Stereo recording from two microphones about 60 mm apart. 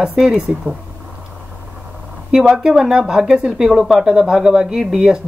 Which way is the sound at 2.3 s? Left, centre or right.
Centre.